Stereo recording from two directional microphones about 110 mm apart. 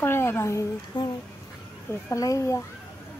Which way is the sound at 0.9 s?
45° left (ahead or behind).